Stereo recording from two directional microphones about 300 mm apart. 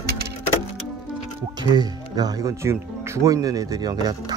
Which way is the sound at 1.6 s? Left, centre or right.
Centre.